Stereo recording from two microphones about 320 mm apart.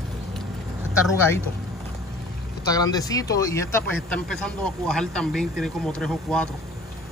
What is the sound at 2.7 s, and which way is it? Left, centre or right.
Speech, centre.